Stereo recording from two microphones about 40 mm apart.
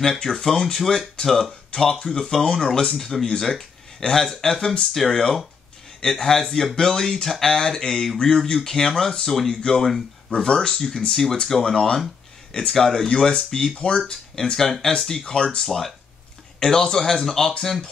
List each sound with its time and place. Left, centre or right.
0.0 s speech: centre
1.7 s speech: left
2.0 s speech: centre
3.0 s speech: centre
10.3 s speech: centre
13.7 s speech: left
14.4 s speech: centre